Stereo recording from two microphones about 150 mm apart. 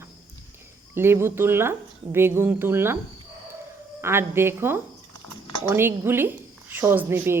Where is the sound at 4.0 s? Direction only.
15° right (ahead or behind).